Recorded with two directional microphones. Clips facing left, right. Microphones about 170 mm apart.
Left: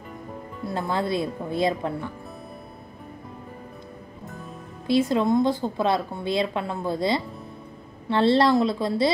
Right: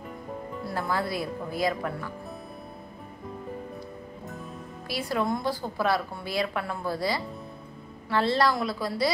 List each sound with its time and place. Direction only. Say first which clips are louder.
0.7 s a woman's voice: left 4 dB; 20° left (ahead or behind)
4.8 s a woman's voice: left 8 dB; 25° left (ahead or behind)